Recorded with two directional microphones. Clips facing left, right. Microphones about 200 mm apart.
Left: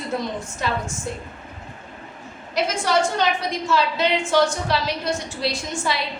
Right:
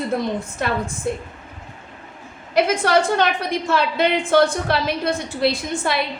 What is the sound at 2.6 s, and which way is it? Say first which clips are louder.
A woman's voice: right 4 dB; 60° right (ahead or behind).